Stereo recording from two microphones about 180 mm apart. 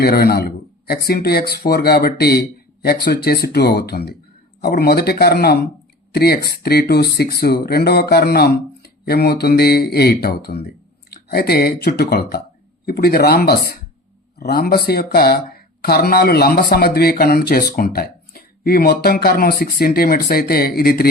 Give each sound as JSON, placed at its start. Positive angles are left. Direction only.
{"t": 0.0, "sound": "speech", "side_deg": 60}